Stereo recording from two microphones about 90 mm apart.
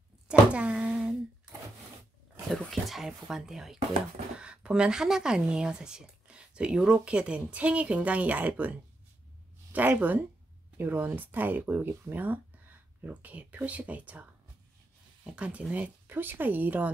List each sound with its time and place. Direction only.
0.3 s a sound: 10° right (ahead or behind)
2.5 s speech: centre (ahead or behind); by 14.2 s 15° right (ahead or behind)
15.2 s speech: 10° right (ahead or behind)